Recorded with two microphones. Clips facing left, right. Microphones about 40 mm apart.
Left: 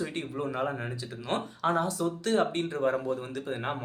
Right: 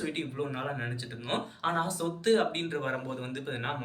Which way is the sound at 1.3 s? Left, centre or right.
Right.